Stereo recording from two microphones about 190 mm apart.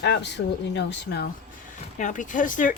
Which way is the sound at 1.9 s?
40° left (ahead or behind).